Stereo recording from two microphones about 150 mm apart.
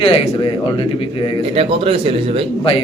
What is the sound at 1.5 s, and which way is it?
Speech, 40° right (ahead or behind).